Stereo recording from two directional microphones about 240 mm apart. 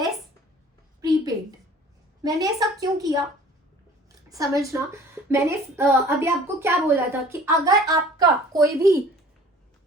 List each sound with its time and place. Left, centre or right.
1.0 s a sound: centre
2.2 s a woman's voice: centre
4.3 s a woman's voice: centre